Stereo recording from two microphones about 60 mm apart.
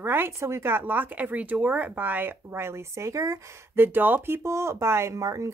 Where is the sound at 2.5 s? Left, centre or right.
Right.